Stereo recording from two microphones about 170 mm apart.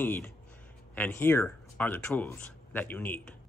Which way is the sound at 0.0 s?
10° left (ahead or behind).